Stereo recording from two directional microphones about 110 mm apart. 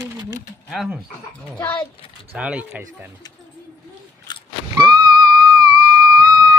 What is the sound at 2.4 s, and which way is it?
Speech, 10° right (ahead or behind).